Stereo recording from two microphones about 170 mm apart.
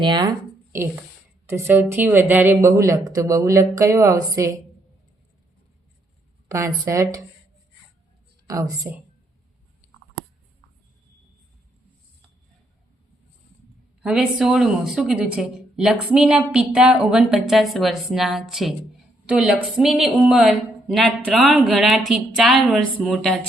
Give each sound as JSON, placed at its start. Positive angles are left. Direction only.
{"t": 0.0, "sound": "speech", "side_deg": -25}
{"t": 6.5, "sound": "speech", "side_deg": -15}
{"t": 8.4, "sound": "a woman's voice", "side_deg": -20}
{"t": 14.0, "sound": "a woman's voice", "side_deg": -5}